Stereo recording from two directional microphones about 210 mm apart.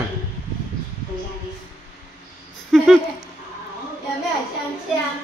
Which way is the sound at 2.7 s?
Centre (ahead or behind).